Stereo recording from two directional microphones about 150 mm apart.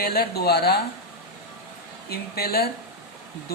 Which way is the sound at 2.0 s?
90° left.